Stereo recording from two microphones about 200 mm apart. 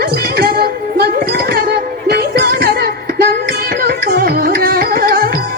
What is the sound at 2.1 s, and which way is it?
Music, 50° right (ahead or behind).